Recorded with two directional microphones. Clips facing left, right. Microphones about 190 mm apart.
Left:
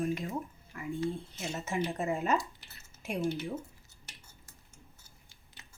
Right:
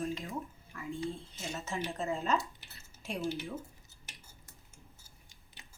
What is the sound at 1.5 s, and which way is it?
Speech, 15° left (ahead or behind).